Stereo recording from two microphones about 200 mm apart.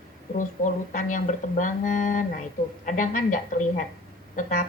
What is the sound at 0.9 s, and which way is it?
A woman's voice, 40° left (ahead or behind).